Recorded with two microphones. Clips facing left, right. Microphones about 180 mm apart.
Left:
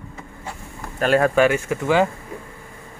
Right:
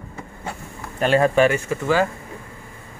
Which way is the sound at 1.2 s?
Centre (ahead or behind).